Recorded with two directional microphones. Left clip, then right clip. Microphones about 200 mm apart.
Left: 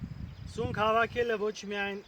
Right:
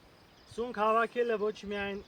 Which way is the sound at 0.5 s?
50° left (ahead or behind).